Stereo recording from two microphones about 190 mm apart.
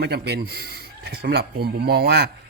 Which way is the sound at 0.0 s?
60° right (ahead or behind).